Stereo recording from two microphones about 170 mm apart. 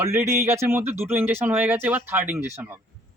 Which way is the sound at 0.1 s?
15° right (ahead or behind).